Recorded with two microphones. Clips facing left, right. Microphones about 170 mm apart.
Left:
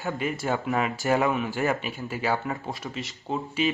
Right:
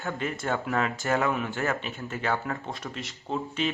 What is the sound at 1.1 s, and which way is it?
Speech, 15° left (ahead or behind).